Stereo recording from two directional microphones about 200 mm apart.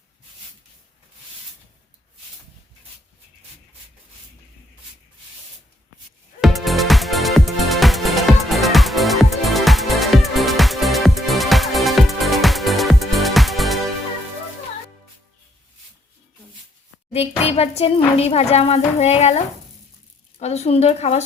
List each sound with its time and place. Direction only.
6.4 s music: centre (ahead or behind)
17.1 s speech: 30° left (ahead or behind)
20.4 s speech: 35° left (ahead or behind)